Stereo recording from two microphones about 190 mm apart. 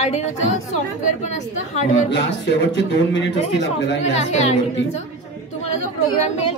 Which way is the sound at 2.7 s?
65° left (ahead or behind).